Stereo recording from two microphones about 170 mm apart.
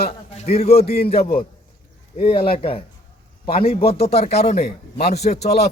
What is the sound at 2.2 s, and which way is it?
A man's voice, 30° left (ahead or behind).